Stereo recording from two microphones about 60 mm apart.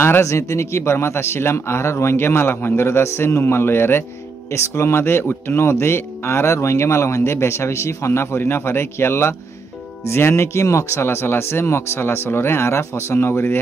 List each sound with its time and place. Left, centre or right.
0.2 s speech: left